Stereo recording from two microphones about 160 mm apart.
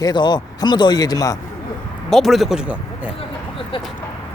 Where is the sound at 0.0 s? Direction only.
25° left (ahead or behind).